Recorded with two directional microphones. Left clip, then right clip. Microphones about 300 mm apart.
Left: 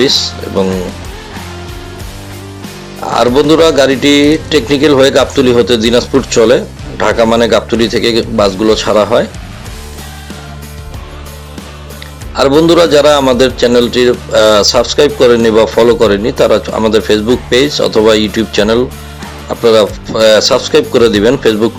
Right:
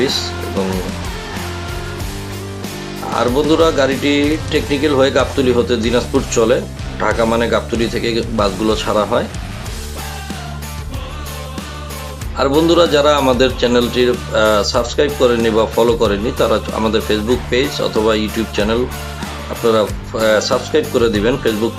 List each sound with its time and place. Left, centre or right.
3.1 s a man's voice: left
12.4 s a man's voice: left